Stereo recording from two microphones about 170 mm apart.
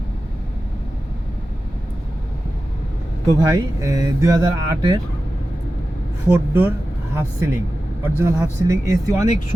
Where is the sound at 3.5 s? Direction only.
20° right (ahead or behind).